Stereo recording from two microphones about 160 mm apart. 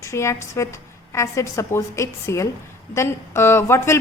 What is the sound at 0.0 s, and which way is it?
A woman's voice, 15° left (ahead or behind).